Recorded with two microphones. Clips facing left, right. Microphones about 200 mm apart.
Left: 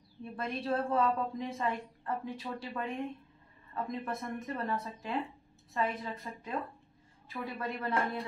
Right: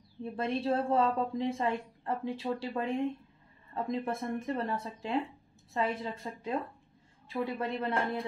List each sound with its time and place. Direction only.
0.2 s a woman's voice: 25° right (ahead or behind)